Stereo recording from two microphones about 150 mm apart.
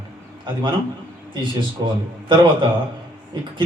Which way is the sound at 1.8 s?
30° right (ahead or behind).